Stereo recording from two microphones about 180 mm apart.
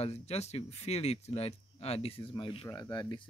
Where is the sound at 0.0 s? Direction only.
35° left (ahead or behind).